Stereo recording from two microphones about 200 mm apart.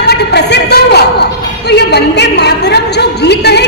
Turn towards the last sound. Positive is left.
turn(degrees=55)  # may be behind; listen again after turning